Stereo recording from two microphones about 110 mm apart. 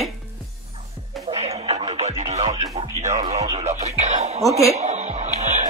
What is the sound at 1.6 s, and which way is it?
Music, 80° right.